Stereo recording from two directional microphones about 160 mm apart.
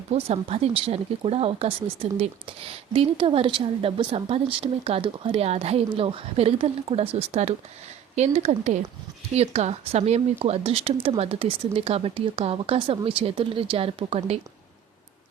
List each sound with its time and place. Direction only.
0.1 s speech: 40° right (ahead or behind)